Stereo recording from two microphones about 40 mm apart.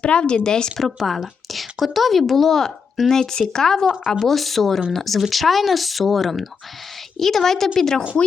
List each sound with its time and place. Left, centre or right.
0.0 s speech: left
0.8 s a woman's voice: centre